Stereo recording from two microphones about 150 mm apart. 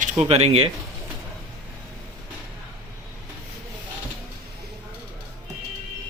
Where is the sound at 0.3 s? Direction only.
45° right (ahead or behind).